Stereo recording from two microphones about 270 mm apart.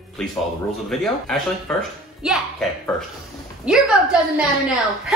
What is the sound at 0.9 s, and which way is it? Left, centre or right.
Speech, centre.